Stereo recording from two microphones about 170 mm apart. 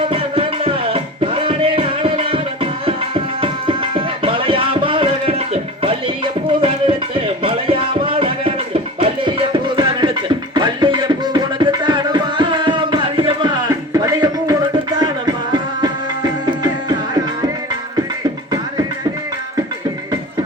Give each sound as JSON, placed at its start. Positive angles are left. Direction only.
{"t": 0.1, "sound": "music", "side_deg": -35}